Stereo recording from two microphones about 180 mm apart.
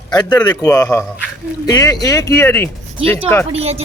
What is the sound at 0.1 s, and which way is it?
A man's voice, 25° left (ahead or behind).